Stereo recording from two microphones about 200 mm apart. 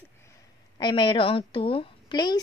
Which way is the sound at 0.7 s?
25° left (ahead or behind).